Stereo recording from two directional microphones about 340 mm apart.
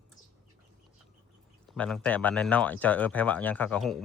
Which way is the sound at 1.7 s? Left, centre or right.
Centre.